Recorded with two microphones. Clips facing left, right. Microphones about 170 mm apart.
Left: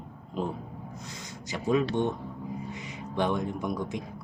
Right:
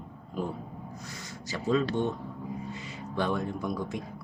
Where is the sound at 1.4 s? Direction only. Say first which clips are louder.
Left 1 dB; 15° left (ahead or behind).